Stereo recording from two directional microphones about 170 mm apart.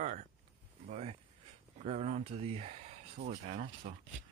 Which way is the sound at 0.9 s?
35° right (ahead or behind).